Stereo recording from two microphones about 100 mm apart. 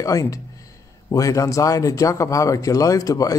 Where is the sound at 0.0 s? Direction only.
35° left (ahead or behind).